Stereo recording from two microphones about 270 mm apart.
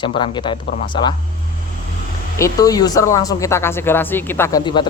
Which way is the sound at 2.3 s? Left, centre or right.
Centre.